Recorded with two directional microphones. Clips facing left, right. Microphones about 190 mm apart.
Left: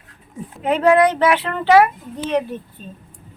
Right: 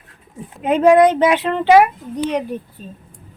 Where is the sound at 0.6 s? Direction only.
20° right (ahead or behind).